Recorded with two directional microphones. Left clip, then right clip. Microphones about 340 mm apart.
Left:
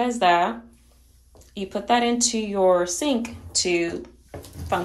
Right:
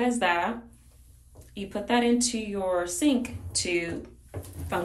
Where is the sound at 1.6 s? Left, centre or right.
Centre.